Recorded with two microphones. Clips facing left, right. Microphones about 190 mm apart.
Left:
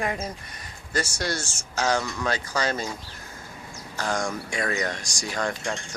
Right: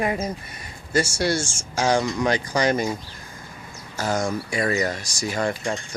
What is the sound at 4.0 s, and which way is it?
Cutlery, 5° right (ahead or behind).